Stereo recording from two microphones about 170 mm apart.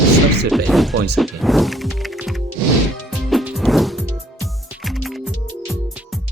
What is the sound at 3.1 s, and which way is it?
Music, centre (ahead or behind).